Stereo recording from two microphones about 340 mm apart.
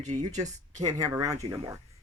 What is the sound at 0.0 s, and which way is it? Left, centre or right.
Speech, right.